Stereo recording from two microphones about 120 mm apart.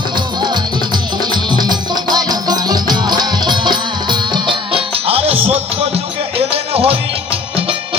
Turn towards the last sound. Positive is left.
turn(degrees=-55)  # may be behind; listen again after turning